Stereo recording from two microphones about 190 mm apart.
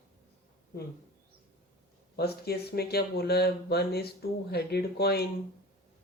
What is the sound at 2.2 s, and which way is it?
Speech, 55° left (ahead or behind).